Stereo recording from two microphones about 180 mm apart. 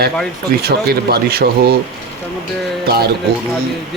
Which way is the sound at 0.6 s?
60° right (ahead or behind).